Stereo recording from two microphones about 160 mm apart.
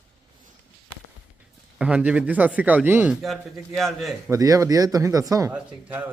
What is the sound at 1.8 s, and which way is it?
Speech, 5° right (ahead or behind).